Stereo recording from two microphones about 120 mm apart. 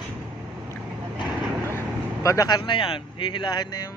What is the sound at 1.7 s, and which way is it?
Vehicle, 25° left (ahead or behind).